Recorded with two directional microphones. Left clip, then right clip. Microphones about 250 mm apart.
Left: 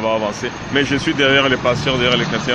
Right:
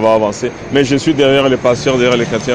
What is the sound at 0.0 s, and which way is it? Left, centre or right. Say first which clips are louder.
Speech: right 7 dB; right.